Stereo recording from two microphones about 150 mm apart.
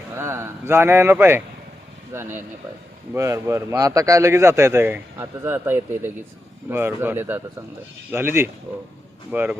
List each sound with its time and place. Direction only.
0.2 s a man's voice: 15° right (ahead or behind)